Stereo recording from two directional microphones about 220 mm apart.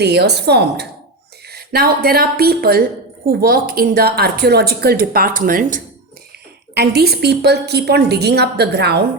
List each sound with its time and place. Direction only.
0.0 s a woman's voice: 50° right (ahead or behind)